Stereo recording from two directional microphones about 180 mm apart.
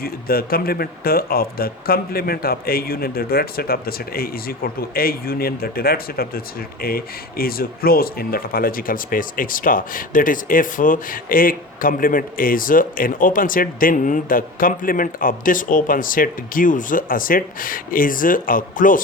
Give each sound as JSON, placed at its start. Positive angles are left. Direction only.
{"t": 0.0, "sound": "speech", "side_deg": 55}